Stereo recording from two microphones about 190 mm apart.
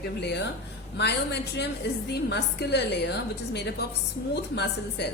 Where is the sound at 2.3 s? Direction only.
60° left (ahead or behind).